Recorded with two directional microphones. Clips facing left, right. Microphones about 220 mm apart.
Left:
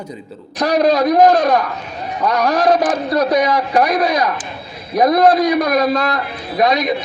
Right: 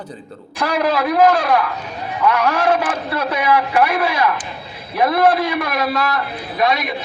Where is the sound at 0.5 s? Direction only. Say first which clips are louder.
Left 5 dB; 40° left (ahead or behind).